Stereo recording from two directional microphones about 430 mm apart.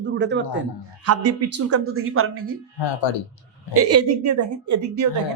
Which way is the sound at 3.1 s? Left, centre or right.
Left.